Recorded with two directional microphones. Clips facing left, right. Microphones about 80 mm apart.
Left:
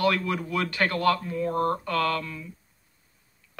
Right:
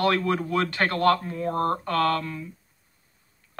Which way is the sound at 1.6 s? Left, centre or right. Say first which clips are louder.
Right 3 dB; right.